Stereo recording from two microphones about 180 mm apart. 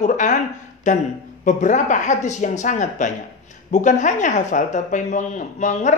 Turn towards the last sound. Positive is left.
turn(degrees=40)  # may be behind; listen again after turning